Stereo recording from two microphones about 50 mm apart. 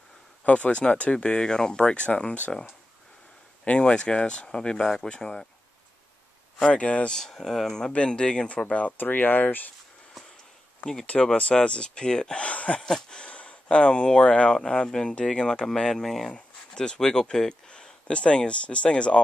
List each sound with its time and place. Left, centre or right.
0.5 s speech: left
3.6 s speech: centre
6.6 s speech: left
7.1 s speech: centre
8.9 s speech: left
11.3 s speech: left
12.8 s speech: centre
16.3 s speech: centre